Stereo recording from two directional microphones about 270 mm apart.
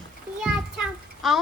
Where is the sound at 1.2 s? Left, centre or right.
Centre.